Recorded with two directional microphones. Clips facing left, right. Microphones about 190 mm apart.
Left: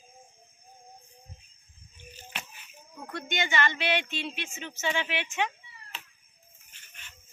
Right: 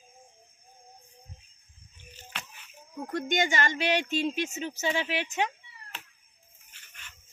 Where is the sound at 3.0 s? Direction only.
45° right (ahead or behind).